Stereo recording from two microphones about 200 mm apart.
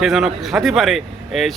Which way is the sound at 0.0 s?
Centre (ahead or behind).